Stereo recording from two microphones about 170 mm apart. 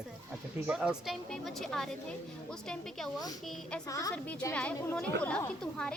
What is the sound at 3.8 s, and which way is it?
Speech, 20° left (ahead or behind).